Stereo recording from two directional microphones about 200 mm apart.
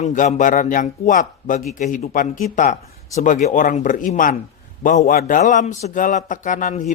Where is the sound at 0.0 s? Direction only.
40° left (ahead or behind).